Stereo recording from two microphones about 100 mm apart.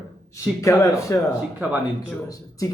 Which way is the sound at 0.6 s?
30° left (ahead or behind).